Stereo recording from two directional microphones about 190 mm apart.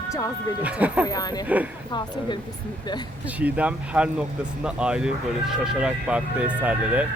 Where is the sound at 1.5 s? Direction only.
10° right (ahead or behind).